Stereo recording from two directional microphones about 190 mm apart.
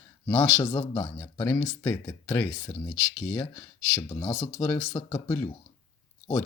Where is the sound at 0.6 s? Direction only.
15° left (ahead or behind).